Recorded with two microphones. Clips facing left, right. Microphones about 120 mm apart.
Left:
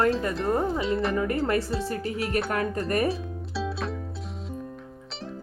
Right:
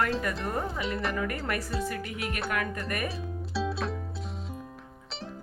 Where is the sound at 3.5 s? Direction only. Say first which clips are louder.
Even; centre (ahead or behind).